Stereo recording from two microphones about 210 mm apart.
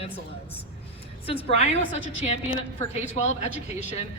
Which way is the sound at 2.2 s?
30° left (ahead or behind).